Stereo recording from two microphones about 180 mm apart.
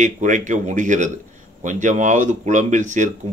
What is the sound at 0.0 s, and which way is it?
A man's voice, 45° right (ahead or behind).